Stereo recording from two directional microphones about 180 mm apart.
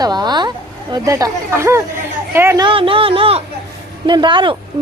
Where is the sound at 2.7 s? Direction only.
30° right (ahead or behind).